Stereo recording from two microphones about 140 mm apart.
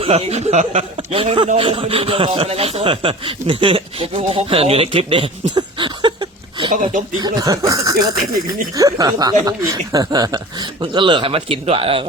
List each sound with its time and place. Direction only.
0.0 s speech: 45° right (ahead or behind)
7.2 s speech: 30° right (ahead or behind)